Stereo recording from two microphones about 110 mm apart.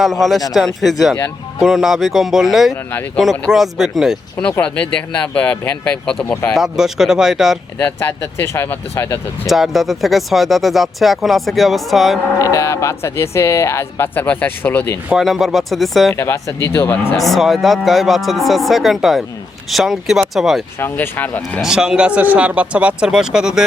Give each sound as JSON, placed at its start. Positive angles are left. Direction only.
{"t": 0.0, "sound": "speech", "side_deg": 0}
{"t": 4.6, "sound": "speech", "side_deg": 10}
{"t": 6.5, "sound": "speech", "side_deg": -5}
{"t": 7.8, "sound": "speech", "side_deg": 20}
{"t": 9.5, "sound": "speech", "side_deg": 0}
{"t": 12.4, "sound": "speech", "side_deg": 30}
{"t": 15.1, "sound": "speech", "side_deg": 0}
{"t": 16.1, "sound": "speech", "side_deg": 25}
{"t": 17.2, "sound": "speech", "side_deg": 0}
{"t": 20.7, "sound": "speech", "side_deg": 20}
{"t": 21.6, "sound": "speech", "side_deg": -5}